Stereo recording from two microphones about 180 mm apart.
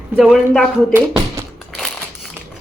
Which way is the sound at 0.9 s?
15° right (ahead or behind).